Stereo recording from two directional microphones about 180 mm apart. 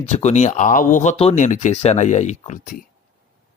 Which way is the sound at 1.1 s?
35° left (ahead or behind).